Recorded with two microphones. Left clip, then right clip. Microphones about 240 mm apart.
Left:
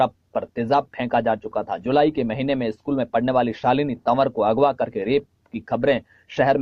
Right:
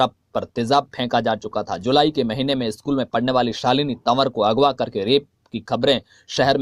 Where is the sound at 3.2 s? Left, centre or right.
Right.